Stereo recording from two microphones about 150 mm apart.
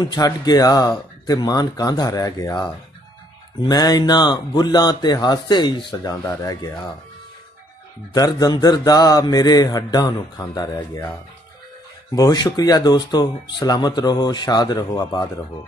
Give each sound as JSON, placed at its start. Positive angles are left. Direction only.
{"t": 0.0, "sound": "speech", "side_deg": 25}
{"t": 8.1, "sound": "speech", "side_deg": 25}
{"t": 12.2, "sound": "speech", "side_deg": 25}